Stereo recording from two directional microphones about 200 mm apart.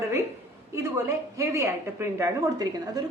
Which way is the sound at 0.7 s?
15° right (ahead or behind).